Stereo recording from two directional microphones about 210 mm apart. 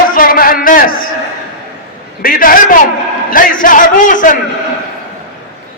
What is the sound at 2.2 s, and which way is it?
A man's voice, 45° left (ahead or behind).